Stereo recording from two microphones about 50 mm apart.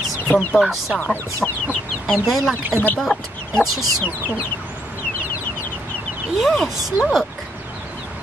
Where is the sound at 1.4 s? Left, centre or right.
Centre.